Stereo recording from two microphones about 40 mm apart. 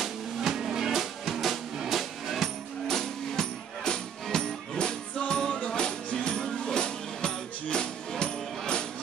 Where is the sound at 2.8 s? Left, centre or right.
Centre.